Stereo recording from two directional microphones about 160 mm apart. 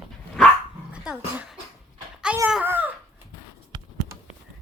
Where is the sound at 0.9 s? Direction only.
5° right (ahead or behind).